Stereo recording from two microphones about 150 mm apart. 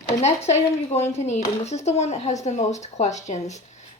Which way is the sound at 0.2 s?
45° left (ahead or behind).